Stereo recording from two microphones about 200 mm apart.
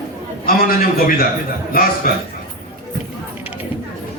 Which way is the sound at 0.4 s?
45° left (ahead or behind).